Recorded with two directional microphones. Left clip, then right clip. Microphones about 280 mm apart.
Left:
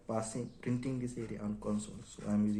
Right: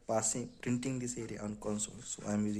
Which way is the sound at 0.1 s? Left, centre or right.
Right.